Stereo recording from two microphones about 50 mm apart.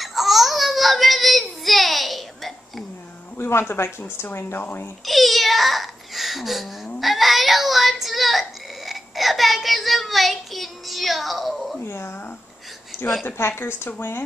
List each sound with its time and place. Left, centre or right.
0.0 s baby cry: centre
3.3 s a woman's voice: left
5.0 s a sound: centre
7.0 s child singing: centre
11.8 s a woman's voice: left